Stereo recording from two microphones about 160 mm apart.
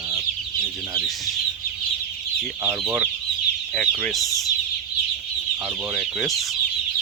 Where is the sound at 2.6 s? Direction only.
15° right (ahead or behind).